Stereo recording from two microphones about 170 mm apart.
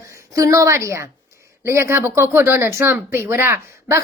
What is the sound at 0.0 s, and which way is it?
A woman's voice, 20° right (ahead or behind).